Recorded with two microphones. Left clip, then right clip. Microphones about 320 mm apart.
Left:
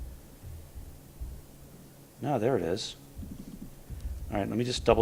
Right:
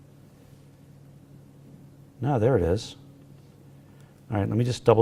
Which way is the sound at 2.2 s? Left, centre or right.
Right.